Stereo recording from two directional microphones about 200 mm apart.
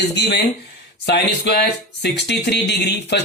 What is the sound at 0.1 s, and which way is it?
Speech, 55° left (ahead or behind).